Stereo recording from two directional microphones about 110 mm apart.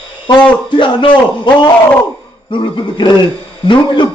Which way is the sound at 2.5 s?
45° left (ahead or behind).